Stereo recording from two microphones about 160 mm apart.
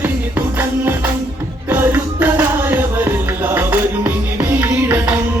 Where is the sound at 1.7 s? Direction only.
10° right (ahead or behind).